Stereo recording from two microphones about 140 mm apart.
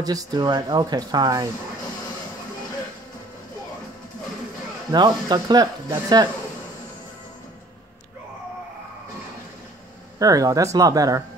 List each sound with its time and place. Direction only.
0.0 s speech: 25° right (ahead or behind)
4.9 s speech: 30° right (ahead or behind)
10.1 s speech: 25° right (ahead or behind)